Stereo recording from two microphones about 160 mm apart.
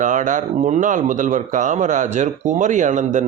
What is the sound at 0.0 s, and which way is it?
Speech, 50° right (ahead or behind).